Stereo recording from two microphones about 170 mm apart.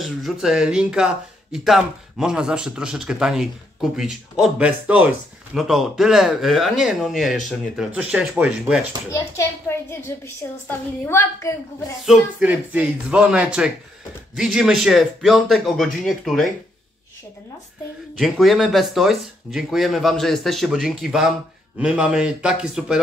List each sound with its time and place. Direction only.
0.0 s speech: centre (ahead or behind)
9.1 s a child's voice: 15° left (ahead or behind)
12.1 s speech: 5° right (ahead or behind)
18.1 s speech: centre (ahead or behind)